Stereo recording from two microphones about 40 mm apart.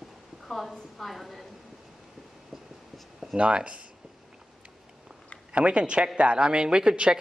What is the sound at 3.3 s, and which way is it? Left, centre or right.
Speech, right.